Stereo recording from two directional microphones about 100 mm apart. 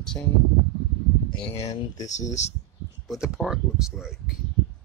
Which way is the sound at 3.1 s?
5° right (ahead or behind).